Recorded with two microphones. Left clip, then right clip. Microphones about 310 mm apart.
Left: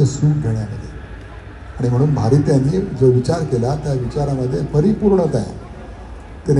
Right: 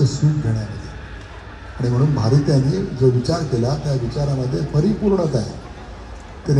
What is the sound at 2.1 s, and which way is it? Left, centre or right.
A man's voice, left.